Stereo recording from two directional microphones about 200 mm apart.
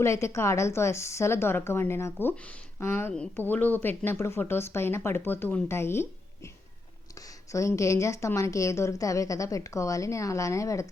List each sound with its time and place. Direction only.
0.0 s a woman's voice: 15° left (ahead or behind)
7.5 s a woman's voice: 15° left (ahead or behind)